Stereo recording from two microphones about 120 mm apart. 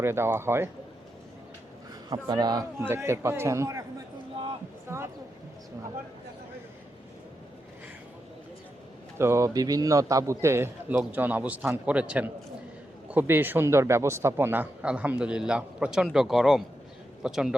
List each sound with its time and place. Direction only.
0.0 s a man's voice: 20° right (ahead or behind)
2.0 s a man's voice: 35° right (ahead or behind)
2.8 s a man's voice: 20° right (ahead or behind)
4.9 s a sound: 20° right (ahead or behind)
9.1 s a man's voice: 20° right (ahead or behind); by 17.5 s 5° right (ahead or behind)